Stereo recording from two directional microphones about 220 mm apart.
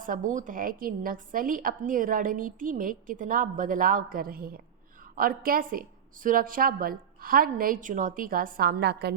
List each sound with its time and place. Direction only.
0.0 s a woman's voice: 35° right (ahead or behind)